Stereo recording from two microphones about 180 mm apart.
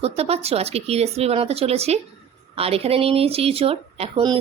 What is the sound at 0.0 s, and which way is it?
A woman's voice, 35° right (ahead or behind).